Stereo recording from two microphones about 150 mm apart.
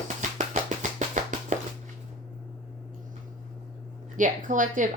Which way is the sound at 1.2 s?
55° right (ahead or behind).